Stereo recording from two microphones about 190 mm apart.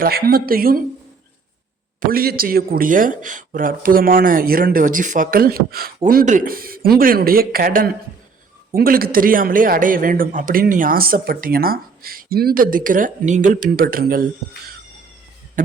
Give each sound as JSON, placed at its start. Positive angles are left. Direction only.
{"t": 0.0, "sound": "a man's voice", "side_deg": -55}
{"t": 2.0, "sound": "a man's voice", "side_deg": -50}